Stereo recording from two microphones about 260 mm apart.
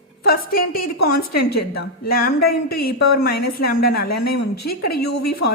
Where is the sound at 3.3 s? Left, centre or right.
Left.